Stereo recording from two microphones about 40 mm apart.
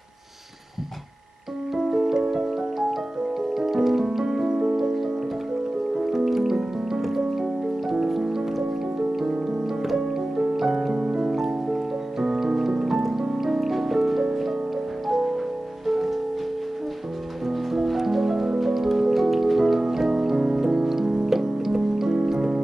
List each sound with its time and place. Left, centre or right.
1.8 s music: centre
3.5 s music: centre
9.7 s music: centre
17.5 s music: centre